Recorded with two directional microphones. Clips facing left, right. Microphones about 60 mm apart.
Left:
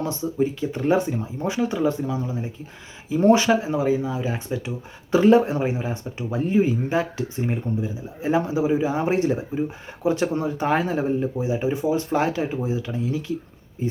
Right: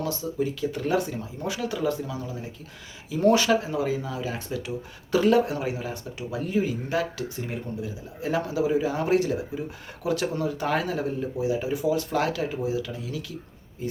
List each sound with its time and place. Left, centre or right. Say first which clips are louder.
0.0 s speech: left 4 dB; left